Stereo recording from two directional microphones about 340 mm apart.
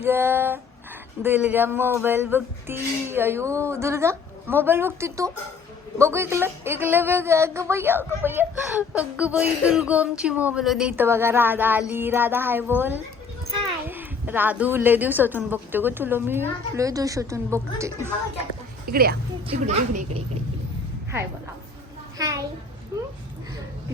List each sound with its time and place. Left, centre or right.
0.0 s a woman's voice: centre
18.9 s a woman's voice: right
22.2 s speech: centre